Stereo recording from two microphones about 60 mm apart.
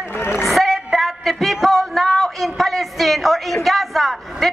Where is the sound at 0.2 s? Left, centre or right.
Left.